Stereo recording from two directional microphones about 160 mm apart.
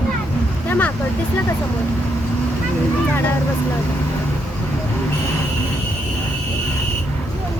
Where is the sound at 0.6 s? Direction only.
10° left (ahead or behind).